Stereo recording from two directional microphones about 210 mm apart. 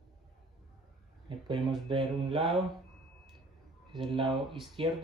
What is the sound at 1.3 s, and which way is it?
Speech, 20° right (ahead or behind).